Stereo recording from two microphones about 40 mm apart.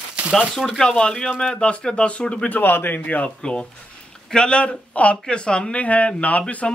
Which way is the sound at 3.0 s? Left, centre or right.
Left.